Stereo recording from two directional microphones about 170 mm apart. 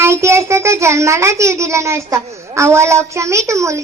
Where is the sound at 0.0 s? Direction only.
15° right (ahead or behind).